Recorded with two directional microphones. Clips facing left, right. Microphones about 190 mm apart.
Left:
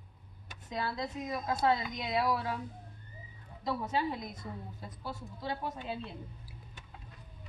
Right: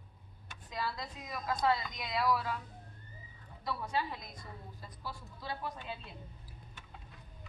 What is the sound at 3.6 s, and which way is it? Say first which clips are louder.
A woman's voice: left 4 dB; 20° left (ahead or behind).